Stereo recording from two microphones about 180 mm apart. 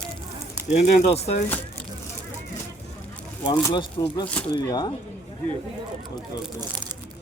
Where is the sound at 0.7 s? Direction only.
35° left (ahead or behind).